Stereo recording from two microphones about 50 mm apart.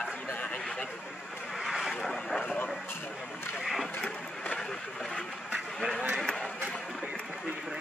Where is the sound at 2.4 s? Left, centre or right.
Left.